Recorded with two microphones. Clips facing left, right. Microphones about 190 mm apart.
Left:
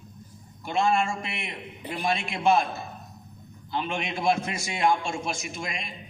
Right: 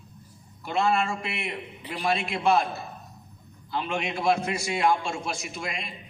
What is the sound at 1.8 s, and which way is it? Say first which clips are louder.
Speech: left 2 dB; 50° left (ahead or behind).